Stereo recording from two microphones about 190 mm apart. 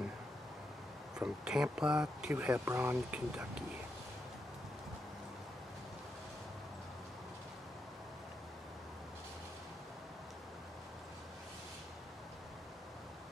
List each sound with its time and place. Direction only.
1.2 s speech: 5° right (ahead or behind)